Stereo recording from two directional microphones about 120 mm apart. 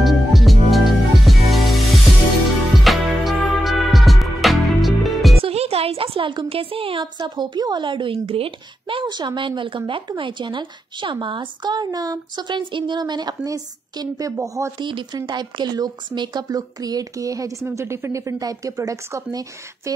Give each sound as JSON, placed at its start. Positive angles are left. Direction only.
{"t": 0.0, "sound": "music", "side_deg": 0}
{"t": 2.8, "sound": "music", "side_deg": 0}
{"t": 5.4, "sound": "speech", "side_deg": -60}
{"t": 14.8, "sound": "a woman's voice", "side_deg": -40}